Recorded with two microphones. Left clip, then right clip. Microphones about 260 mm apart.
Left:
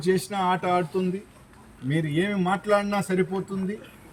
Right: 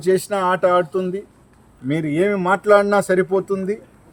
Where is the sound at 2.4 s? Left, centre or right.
Right.